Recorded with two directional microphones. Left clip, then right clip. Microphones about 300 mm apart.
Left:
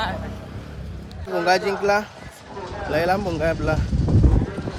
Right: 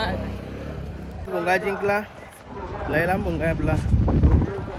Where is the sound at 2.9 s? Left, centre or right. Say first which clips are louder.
Left 2 dB; centre.